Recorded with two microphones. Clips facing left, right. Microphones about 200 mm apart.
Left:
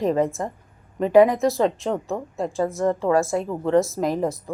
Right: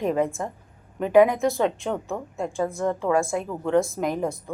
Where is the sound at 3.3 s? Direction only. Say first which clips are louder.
Left 3 dB; 30° left (ahead or behind).